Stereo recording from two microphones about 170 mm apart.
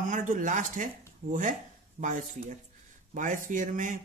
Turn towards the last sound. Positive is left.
turn(degrees=-50)  # may be behind; listen again after turning